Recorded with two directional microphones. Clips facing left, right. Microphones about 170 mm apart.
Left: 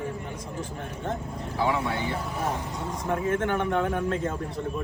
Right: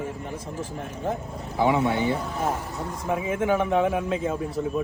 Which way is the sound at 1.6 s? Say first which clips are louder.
Right 5 dB; 20° right (ahead or behind).